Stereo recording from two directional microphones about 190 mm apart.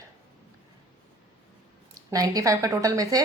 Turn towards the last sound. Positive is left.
turn(degrees=-20)  # may be behind; listen again after turning